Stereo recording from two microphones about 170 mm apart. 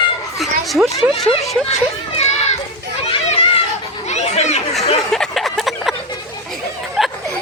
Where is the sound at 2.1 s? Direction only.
40° left (ahead or behind).